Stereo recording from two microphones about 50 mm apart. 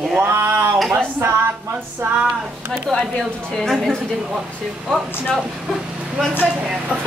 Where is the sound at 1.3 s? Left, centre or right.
Right.